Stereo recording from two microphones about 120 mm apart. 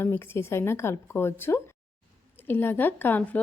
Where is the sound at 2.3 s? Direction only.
15° left (ahead or behind).